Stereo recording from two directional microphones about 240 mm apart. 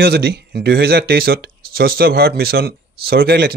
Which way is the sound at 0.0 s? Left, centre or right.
Right.